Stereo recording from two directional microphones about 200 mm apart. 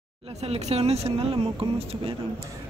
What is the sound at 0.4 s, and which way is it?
Speech, 30° right (ahead or behind).